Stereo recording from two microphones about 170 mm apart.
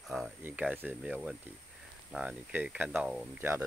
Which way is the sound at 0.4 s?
10° right (ahead or behind).